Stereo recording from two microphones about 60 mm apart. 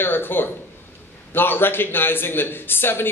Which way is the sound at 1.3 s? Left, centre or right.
Left.